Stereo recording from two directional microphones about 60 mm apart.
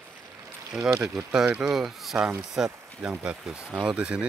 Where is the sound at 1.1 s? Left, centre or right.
Centre.